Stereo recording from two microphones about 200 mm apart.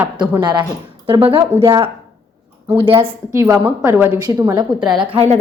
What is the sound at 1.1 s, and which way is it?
A woman's voice, 25° right (ahead or behind).